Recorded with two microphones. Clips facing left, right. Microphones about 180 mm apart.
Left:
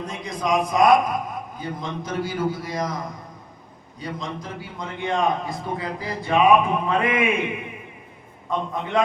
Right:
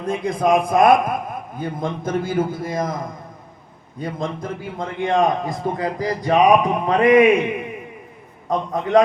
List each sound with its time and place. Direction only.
0.0 s a man's voice: 55° right (ahead or behind); by 7.3 s 40° right (ahead or behind)
8.4 s a man's voice: 40° right (ahead or behind)